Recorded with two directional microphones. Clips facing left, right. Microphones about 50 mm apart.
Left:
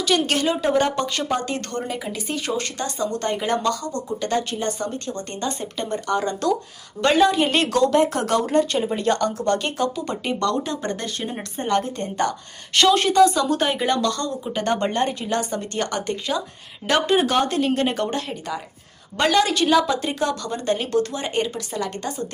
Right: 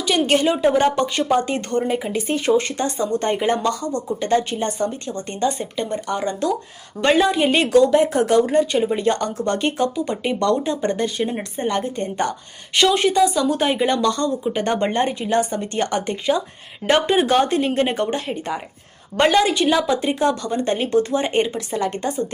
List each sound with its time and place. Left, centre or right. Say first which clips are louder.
0.0 s a woman's voice: right 3 dB; centre